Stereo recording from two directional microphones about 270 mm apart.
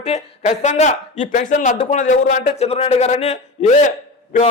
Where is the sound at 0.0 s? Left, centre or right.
Left.